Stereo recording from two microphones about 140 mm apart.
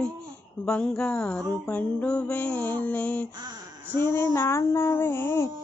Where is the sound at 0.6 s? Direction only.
5° left (ahead or behind).